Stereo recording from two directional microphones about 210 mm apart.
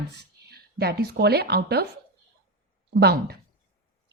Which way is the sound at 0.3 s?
50° right (ahead or behind).